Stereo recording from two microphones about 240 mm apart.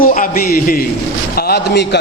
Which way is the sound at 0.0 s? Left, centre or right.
Left.